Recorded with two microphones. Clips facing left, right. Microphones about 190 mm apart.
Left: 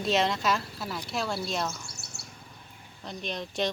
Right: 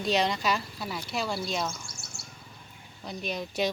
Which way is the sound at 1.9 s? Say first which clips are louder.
Even; 65° left (ahead or behind).